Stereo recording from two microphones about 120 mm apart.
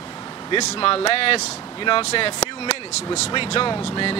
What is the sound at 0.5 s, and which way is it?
Speech, 45° left (ahead or behind).